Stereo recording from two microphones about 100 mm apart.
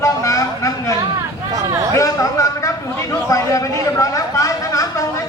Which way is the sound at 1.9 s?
35° left (ahead or behind).